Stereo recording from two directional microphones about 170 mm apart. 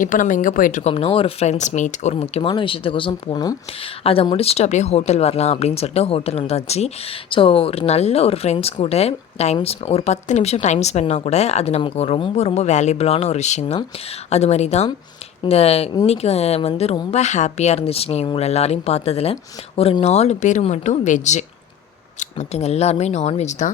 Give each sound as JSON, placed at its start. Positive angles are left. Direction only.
{"t": 0.0, "sound": "speech", "side_deg": 50}